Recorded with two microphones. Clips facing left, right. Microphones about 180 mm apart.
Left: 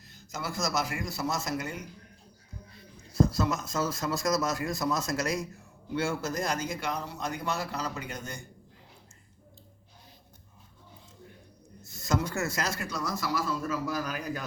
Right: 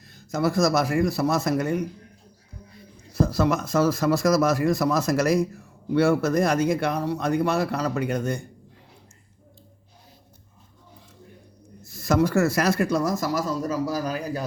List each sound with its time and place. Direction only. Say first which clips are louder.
0.1 s speech: right 13 dB; 55° right (ahead or behind)
3.2 s speech: right 5 dB; 65° right (ahead or behind)
12.0 s speech: right 10 dB; 65° right (ahead or behind); by 14.4 s 35° right (ahead or behind)